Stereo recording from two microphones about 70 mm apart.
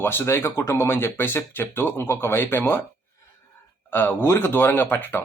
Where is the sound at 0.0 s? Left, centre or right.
Left.